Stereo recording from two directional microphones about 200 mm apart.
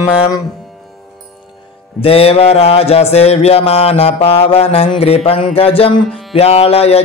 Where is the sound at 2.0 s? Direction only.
30° left (ahead or behind).